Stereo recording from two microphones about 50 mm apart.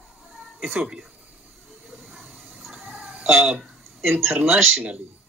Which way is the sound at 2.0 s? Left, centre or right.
Centre.